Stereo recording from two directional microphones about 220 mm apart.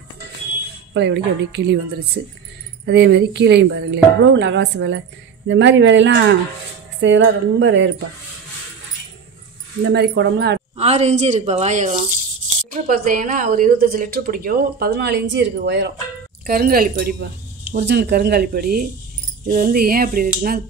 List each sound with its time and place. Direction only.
0.9 s a woman's voice: 50° right (ahead or behind)
9.8 s a woman's voice: 50° right (ahead or behind)
10.8 s a woman's voice: 30° right (ahead or behind)